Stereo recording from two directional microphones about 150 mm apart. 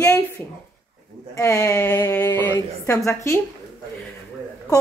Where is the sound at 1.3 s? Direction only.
20° left (ahead or behind).